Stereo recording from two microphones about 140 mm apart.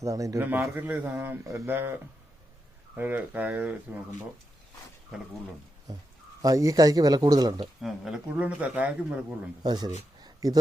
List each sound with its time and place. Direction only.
0.0 s a man's voice: 25° right (ahead or behind)
6.4 s a man's voice: 25° right (ahead or behind)
7.8 s speech: centre (ahead or behind)
9.6 s a man's voice: 30° right (ahead or behind)
10.2 s a sound: 30° right (ahead or behind)